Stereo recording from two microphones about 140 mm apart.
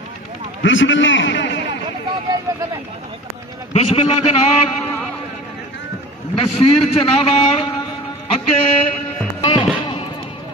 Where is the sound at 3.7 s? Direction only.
45° left (ahead or behind).